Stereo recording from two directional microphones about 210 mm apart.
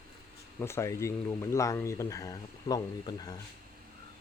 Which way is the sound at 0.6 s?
10° left (ahead or behind).